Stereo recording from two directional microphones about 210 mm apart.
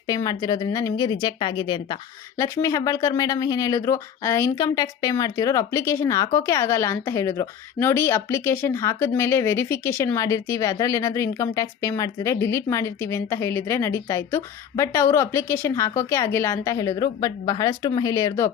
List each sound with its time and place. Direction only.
0.1 s speech: 20° left (ahead or behind)